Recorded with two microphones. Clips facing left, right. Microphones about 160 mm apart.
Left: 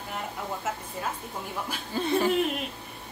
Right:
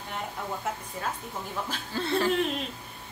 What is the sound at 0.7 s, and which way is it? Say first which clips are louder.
Speech: left 1 dB; 5° left (ahead or behind).